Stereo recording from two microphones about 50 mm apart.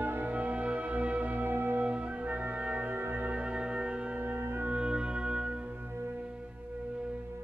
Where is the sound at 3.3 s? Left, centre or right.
Right.